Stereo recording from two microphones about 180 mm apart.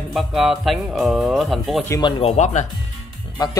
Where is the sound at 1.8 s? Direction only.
20° left (ahead or behind).